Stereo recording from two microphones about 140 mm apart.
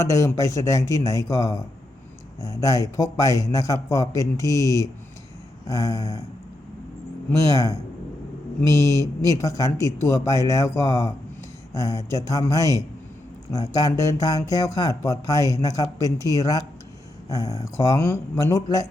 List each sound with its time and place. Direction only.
0.1 s speech: 25° left (ahead or behind)
7.3 s speech: 25° left (ahead or behind)